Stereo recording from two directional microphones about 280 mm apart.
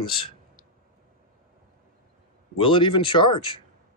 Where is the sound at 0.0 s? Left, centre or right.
Centre.